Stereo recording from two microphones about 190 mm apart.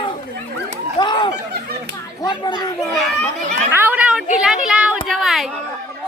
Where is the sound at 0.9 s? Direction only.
25° left (ahead or behind).